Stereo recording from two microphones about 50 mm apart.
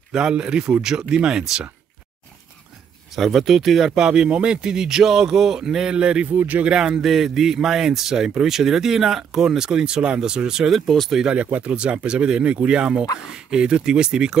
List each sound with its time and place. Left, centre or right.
0.1 s a man's voice: centre
3.2 s speech: centre
3.9 s a man's voice: centre
6.3 s speech: right
6.7 s a man's voice: centre
7.0 s a man's voice: centre
10.9 s speech: centre
11.5 s a man's voice: right